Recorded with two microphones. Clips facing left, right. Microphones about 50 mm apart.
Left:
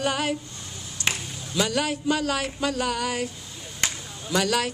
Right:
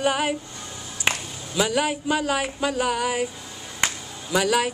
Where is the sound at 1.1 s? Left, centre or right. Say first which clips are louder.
Right 3 dB; right.